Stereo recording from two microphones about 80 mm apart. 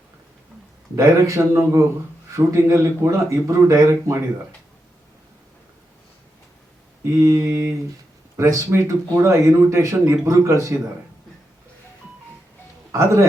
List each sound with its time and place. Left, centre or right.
0.9 s speech: right
7.0 s speech: right
12.9 s a man's voice: right